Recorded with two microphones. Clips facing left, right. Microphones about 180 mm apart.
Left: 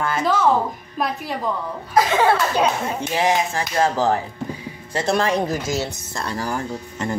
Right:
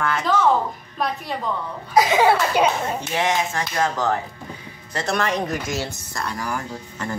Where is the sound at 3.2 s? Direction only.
30° left (ahead or behind).